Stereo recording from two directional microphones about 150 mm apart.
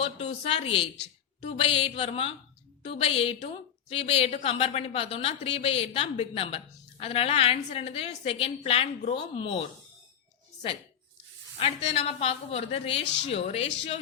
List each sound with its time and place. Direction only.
0.2 s a woman's voice: 45° left (ahead or behind)
11.6 s a woman's voice: 40° left (ahead or behind)